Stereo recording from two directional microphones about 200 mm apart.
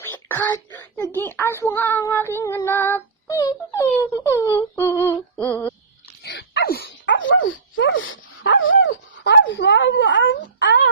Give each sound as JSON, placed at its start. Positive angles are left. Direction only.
{"t": 0.0, "sound": "a child's voice", "side_deg": 10}
{"t": 6.2, "sound": "dog", "side_deg": 55}